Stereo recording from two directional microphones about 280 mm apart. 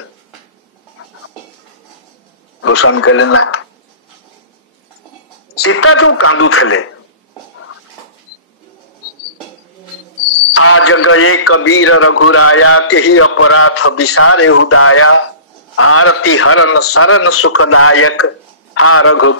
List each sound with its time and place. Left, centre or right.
2.6 s speech: left
5.6 s a man's voice: left
10.5 s a man's voice: left